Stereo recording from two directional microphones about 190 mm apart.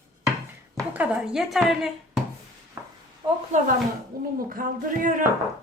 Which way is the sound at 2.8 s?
15° right (ahead or behind).